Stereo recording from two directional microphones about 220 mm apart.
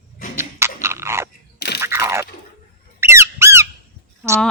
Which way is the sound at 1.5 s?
50° left (ahead or behind).